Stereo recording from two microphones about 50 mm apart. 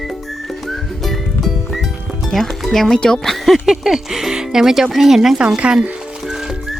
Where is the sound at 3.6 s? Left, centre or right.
Centre.